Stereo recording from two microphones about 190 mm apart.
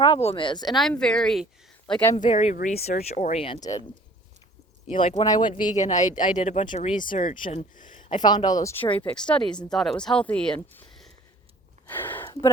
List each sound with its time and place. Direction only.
0.0 s speech: 30° left (ahead or behind)
0.8 s speech: 5° left (ahead or behind)
2.2 s speech: 40° left (ahead or behind)
3.4 s speech: 25° left (ahead or behind)
4.9 s speech: 30° left (ahead or behind)
5.7 s speech: 40° left (ahead or behind)
8.1 s speech: 25° left (ahead or behind)
8.8 s speech: 10° left (ahead or behind)
11.9 s a sound: 10° left (ahead or behind)